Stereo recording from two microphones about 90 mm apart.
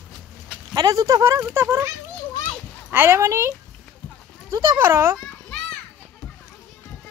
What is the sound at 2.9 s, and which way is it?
Speech, 25° right (ahead or behind).